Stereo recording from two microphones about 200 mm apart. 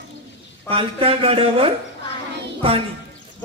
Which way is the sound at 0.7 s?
30° right (ahead or behind).